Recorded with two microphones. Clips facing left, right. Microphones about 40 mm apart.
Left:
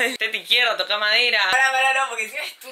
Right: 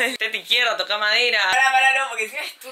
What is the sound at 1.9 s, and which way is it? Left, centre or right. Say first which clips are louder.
Speech: even; centre.